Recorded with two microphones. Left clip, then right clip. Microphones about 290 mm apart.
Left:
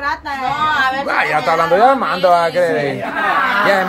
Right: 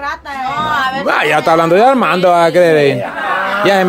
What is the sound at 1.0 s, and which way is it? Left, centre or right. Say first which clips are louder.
Speech: right 4 dB; right.